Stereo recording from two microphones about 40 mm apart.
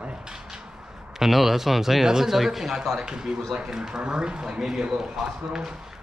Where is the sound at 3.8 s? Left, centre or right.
Right.